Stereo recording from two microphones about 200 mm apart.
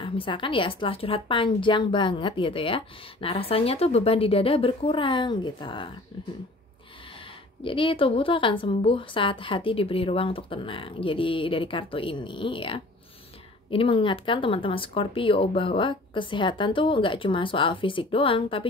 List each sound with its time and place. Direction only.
0.0 s a woman's voice: 25° left (ahead or behind)
7.6 s a woman's voice: 25° left (ahead or behind)